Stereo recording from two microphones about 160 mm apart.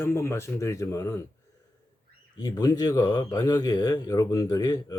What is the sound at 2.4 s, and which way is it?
Speech, 25° left (ahead or behind).